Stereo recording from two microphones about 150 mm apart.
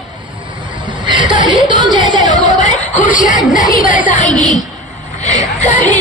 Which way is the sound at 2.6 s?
55° left (ahead or behind).